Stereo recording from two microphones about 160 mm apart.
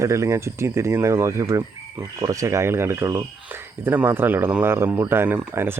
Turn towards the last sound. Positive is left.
turn(degrees=-15)  # may be behind; listen again after turning